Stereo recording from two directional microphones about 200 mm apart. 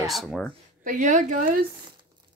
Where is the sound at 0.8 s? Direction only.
40° right (ahead or behind).